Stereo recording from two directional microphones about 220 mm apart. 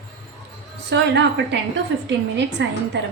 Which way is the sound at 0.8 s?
50° right (ahead or behind).